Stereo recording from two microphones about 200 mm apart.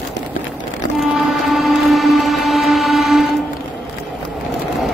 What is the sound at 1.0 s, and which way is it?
Train, centre (ahead or behind).